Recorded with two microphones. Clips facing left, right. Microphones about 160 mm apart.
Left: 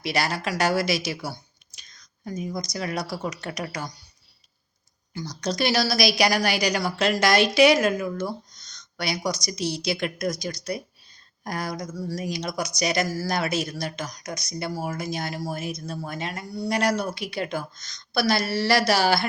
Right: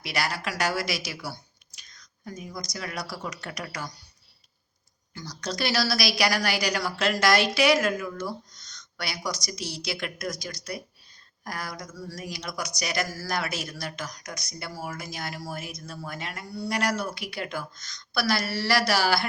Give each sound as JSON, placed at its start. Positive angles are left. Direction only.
{"t": 0.0, "sound": "speech", "side_deg": 25}
{"t": 5.1, "sound": "speech", "side_deg": 20}